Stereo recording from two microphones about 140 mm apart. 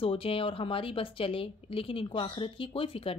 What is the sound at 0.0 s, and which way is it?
Speech, 40° left (ahead or behind).